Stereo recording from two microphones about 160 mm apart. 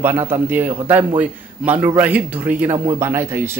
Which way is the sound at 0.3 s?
10° right (ahead or behind).